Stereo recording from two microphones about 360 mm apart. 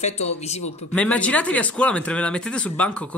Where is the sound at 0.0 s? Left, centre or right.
Centre.